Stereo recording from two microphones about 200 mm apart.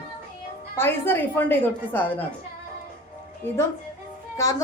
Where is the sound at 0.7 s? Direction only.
10° left (ahead or behind).